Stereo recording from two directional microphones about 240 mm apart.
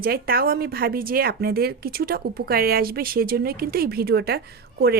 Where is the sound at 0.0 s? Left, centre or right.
Right.